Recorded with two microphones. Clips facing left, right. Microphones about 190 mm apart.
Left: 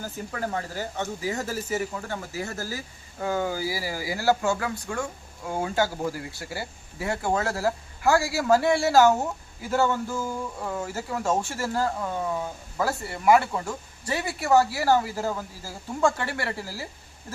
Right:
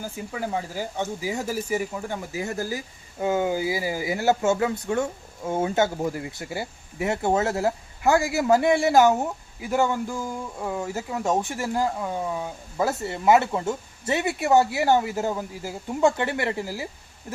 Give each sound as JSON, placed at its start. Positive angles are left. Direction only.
{"t": 0.0, "sound": "speech", "side_deg": -10}